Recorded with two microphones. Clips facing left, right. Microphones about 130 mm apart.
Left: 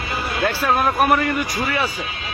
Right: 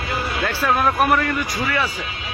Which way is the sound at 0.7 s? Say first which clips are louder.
Even; 10° left (ahead or behind).